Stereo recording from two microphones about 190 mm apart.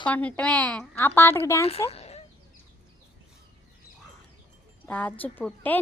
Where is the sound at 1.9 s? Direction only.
35° left (ahead or behind).